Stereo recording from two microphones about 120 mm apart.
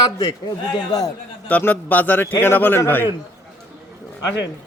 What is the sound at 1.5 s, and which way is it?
A man's voice, 15° left (ahead or behind).